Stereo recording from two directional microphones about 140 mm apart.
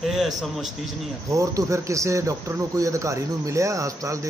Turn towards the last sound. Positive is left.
turn(degrees=-20)  # may be behind; listen again after turning